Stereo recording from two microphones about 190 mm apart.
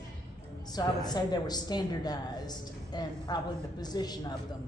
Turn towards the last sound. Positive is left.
turn(degrees=20)  # may be behind; listen again after turning